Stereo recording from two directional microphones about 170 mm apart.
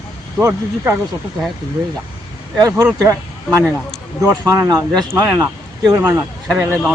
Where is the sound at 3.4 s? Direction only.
5° right (ahead or behind).